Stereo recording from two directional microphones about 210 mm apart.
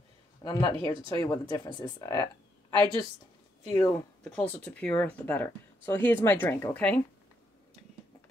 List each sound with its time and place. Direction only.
0.4 s speech: 20° left (ahead or behind)
0.7 s speech: 25° right (ahead or behind)
1.7 s speech: 20° left (ahead or behind)
2.7 s speech: 20° right (ahead or behind)
3.7 s speech: 10° left (ahead or behind)